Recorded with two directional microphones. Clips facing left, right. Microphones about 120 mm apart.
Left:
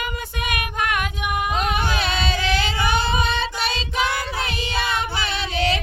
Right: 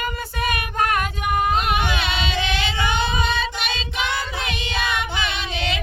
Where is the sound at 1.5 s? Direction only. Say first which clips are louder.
Right 1 dB; 40° left (ahead or behind).